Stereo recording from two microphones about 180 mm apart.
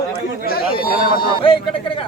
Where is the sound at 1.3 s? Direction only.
30° left (ahead or behind).